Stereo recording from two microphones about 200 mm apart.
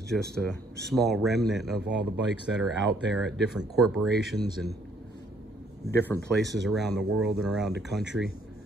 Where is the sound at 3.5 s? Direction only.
5° right (ahead or behind).